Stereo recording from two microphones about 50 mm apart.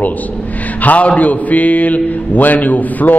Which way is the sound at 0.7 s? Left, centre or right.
Left.